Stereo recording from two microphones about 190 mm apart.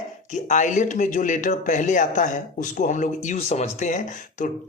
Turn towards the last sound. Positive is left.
turn(degrees=40)  # may be behind; listen again after turning